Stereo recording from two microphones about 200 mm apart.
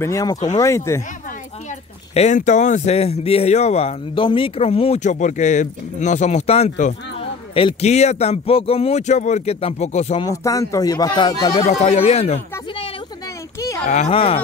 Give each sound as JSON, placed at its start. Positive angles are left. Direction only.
{"t": 0.0, "sound": "speech", "side_deg": 15}
{"t": 2.1, "sound": "speech", "side_deg": 35}
{"t": 10.2, "sound": "speech", "side_deg": 15}
{"t": 11.6, "sound": "speech", "side_deg": 30}
{"t": 13.6, "sound": "livestock", "side_deg": 15}
{"t": 13.8, "sound": "speech", "side_deg": 35}